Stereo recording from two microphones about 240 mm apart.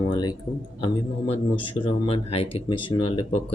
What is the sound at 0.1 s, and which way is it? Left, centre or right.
Speech, centre.